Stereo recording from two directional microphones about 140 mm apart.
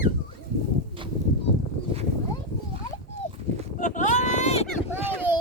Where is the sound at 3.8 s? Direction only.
65° left (ahead or behind).